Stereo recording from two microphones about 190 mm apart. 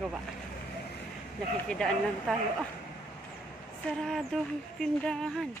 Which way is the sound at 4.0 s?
Centre (ahead or behind).